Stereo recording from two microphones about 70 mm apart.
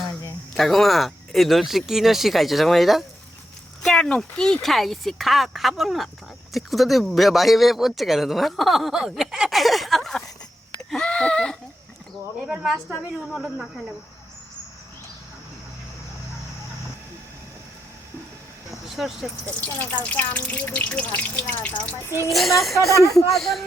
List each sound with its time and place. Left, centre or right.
0.5 s speech: centre
3.8 s speech: centre
10.8 s a sound: centre
13.3 s speech: centre
19.0 s speech: centre
19.5 s speech: left
22.3 s speech: centre